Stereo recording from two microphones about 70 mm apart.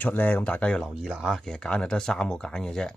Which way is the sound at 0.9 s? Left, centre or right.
Centre.